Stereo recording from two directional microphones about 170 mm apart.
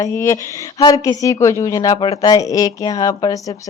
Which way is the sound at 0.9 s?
20° left (ahead or behind).